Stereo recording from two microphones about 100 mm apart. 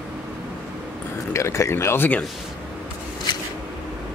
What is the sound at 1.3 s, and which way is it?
Speech, 30° left (ahead or behind).